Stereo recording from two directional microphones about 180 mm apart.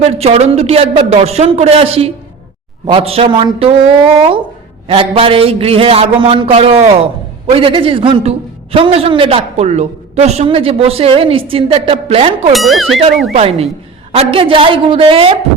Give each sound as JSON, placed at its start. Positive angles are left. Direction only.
{"t": 0.0, "sound": "a man's voice", "side_deg": -35}
{"t": 4.9, "sound": "a man's voice", "side_deg": -30}
{"t": 12.5, "sound": "speech", "side_deg": 0}
{"t": 13.3, "sound": "a man's voice", "side_deg": -35}